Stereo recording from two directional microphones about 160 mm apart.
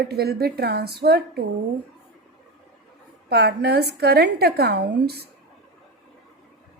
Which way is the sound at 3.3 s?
90° right.